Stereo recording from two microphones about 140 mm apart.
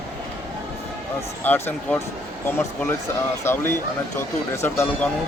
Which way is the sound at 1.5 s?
15° left (ahead or behind).